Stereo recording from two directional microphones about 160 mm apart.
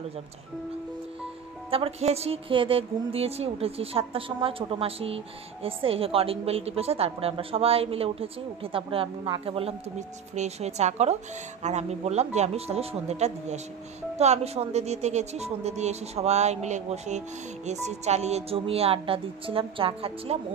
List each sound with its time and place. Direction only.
1.7 s a woman's voice: 35° right (ahead or behind)